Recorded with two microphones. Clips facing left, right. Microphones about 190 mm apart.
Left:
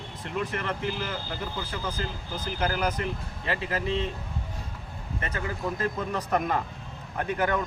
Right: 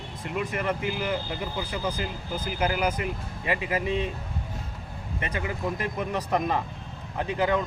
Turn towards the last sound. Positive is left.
turn(degrees=-15)  # may be behind; listen again after turning